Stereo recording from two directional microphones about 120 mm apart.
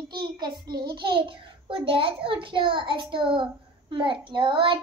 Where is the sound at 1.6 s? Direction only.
45° right (ahead or behind).